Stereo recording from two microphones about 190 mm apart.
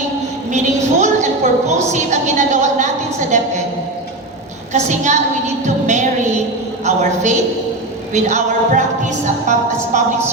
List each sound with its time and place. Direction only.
0.5 s a sound: 40° right (ahead or behind)
1.9 s a woman's voice: 40° right (ahead or behind)
4.7 s a woman's voice: 40° right (ahead or behind)
5.6 s music: 40° right (ahead or behind)
6.8 s a sound: 40° right (ahead or behind)
8.1 s music: 40° right (ahead or behind)